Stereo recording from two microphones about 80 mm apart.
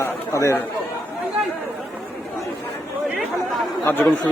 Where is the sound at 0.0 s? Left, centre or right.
Left.